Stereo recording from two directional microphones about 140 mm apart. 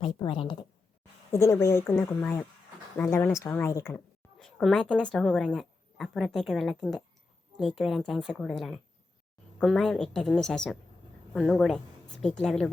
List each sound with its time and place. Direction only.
0.2 s a woman's voice: 35° left (ahead or behind)
1.3 s a woman's voice: 20° left (ahead or behind)
4.4 s a woman's voice: 5° left (ahead or behind)